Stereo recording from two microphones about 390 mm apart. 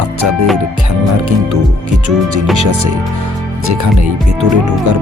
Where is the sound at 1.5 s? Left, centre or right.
Right.